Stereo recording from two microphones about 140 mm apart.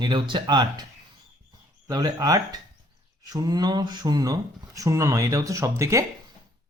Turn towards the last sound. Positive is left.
turn(degrees=-20)  # may be behind; listen again after turning